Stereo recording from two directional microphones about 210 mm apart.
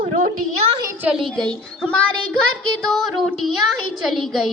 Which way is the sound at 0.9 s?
5° right (ahead or behind).